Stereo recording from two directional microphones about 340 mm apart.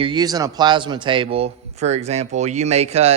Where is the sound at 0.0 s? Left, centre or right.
Centre.